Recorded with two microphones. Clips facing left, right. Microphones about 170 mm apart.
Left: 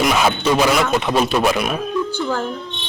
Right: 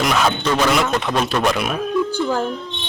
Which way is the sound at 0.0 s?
5° left (ahead or behind).